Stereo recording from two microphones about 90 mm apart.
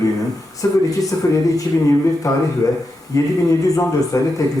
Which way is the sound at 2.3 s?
40° left (ahead or behind).